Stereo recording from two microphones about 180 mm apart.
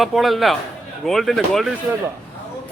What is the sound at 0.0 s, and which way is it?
A man's voice, centre (ahead or behind).